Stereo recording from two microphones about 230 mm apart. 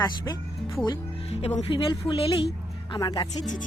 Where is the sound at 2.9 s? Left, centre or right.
Left.